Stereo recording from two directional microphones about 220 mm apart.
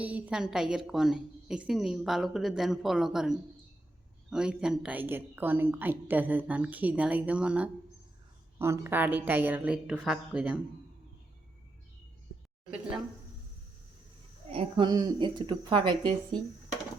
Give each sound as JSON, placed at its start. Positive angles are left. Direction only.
{"t": 0.0, "sound": "a woman's voice", "side_deg": -5}
{"t": 14.5, "sound": "a woman's voice", "side_deg": -20}